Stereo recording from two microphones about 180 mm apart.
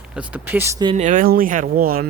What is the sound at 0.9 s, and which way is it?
Speech, 45° right (ahead or behind).